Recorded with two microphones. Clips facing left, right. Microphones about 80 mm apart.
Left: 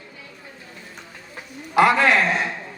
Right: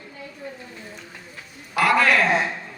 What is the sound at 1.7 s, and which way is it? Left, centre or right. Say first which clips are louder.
Speech: left 2 dB; left.